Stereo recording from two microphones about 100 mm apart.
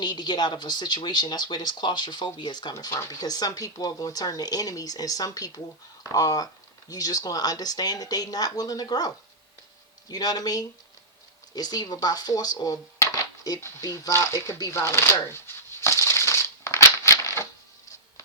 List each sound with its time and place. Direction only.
0.0 s speech: 45° left (ahead or behind)
2.7 s speech: 30° left (ahead or behind)
13.6 s shuffling cards: 30° left (ahead or behind)